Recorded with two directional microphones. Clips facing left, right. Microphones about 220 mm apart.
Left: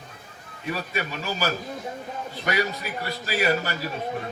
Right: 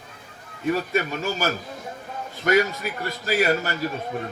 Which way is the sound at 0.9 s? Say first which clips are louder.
Right 5 dB; 45° right (ahead or behind).